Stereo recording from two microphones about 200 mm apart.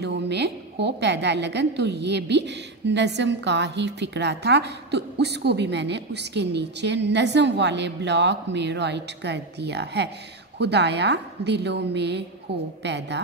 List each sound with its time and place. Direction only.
0.0 s a woman's voice: 60° right (ahead or behind)